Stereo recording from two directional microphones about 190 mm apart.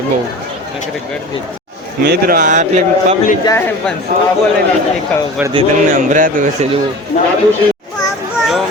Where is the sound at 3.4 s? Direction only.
20° left (ahead or behind).